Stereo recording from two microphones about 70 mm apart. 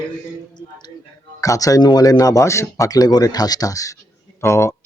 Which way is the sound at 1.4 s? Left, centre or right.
Left.